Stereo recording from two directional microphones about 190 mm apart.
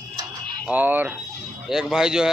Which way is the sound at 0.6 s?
10° right (ahead or behind).